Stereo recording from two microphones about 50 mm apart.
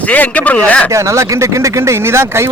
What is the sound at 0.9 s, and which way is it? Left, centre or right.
Speech, right.